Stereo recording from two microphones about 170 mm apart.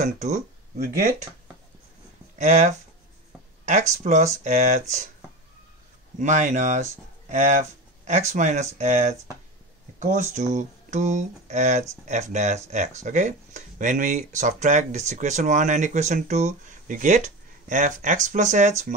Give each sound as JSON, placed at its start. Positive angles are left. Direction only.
{"t": 0.0, "sound": "speech", "side_deg": -45}
{"t": 2.3, "sound": "speech", "side_deg": -45}
{"t": 6.1, "sound": "speech", "side_deg": -45}